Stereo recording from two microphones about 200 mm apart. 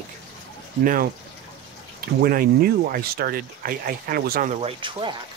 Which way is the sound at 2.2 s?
50° right (ahead or behind).